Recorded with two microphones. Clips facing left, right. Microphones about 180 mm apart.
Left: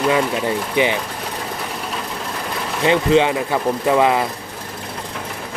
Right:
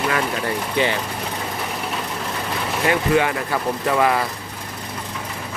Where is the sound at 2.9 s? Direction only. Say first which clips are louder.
Left 4 dB; 20° left (ahead or behind).